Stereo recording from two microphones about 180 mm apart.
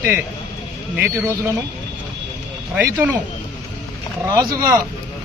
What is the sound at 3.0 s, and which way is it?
Speech, 15° right (ahead or behind).